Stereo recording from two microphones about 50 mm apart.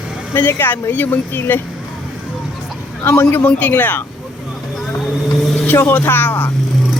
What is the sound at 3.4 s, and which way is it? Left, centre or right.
Speech, left.